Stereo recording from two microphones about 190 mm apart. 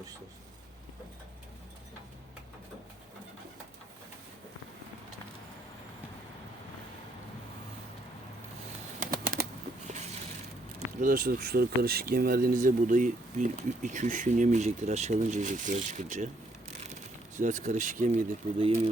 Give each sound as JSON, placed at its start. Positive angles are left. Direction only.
{"t": 9.0, "sound": "bird", "side_deg": -50}
{"t": 10.8, "sound": "speech", "side_deg": -45}
{"t": 16.8, "sound": "a sound", "side_deg": -40}